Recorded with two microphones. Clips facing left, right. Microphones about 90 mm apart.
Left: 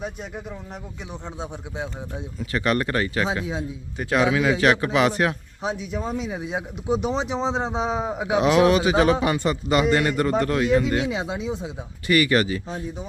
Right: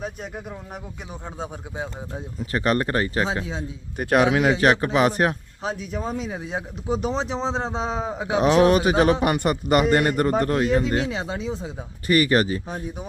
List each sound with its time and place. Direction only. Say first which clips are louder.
0.0 s speech: even; centre (ahead or behind)
2.1 s speech: right 1 dB; 40° right (ahead or behind)
3.9 s speech: right 3 dB; 50° right (ahead or behind)
4.4 s speech: right 1 dB; 40° right (ahead or behind)
5.9 s speech: left 1 dB; centre (ahead or behind)
8.4 s speech: right 1 dB; 35° right (ahead or behind)
9.2 s speech: right 1 dB; 55° right (ahead or behind)
9.9 s speech: right 1 dB; 45° right (ahead or behind)
11.1 s speech: left 1 dB; 5° left (ahead or behind)
12.0 s speech: right 1 dB; 40° right (ahead or behind)